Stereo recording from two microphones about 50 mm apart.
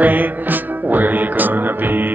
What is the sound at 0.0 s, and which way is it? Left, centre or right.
Music, right.